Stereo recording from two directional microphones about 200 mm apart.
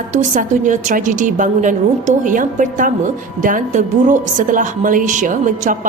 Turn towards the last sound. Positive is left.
turn(degrees=-40)  # may be behind; listen again after turning